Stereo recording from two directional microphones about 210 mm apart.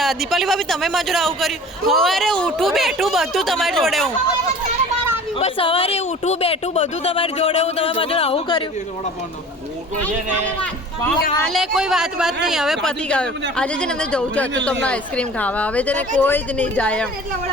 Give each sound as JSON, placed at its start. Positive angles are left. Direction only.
{"t": 0.0, "sound": "a man's voice", "side_deg": 0}
{"t": 5.4, "sound": "speech", "side_deg": 25}
{"t": 11.3, "sound": "a man's voice", "side_deg": 0}